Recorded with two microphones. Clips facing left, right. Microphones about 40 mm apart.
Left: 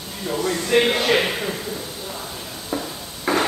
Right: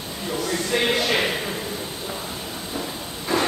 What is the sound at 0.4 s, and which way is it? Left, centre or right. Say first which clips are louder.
Speech: left 5 dB; left.